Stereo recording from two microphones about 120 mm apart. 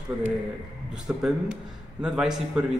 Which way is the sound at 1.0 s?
5° right (ahead or behind).